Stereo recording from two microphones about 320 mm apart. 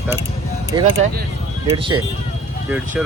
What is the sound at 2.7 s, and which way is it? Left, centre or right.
Speech, centre.